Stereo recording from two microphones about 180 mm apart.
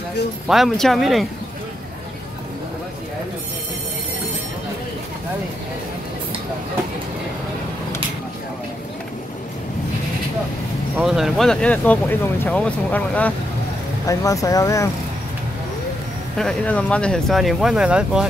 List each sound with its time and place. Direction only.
0.5 s speech: centre (ahead or behind)
11.1 s speech: centre (ahead or behind)
14.0 s speech: 20° left (ahead or behind)
16.3 s speech: 5° left (ahead or behind)